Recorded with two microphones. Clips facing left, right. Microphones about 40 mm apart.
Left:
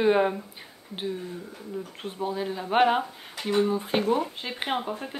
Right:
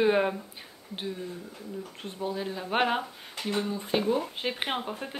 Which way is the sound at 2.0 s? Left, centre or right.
Centre.